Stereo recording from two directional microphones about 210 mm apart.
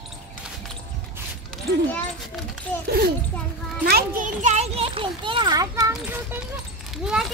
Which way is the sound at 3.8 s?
45° right (ahead or behind).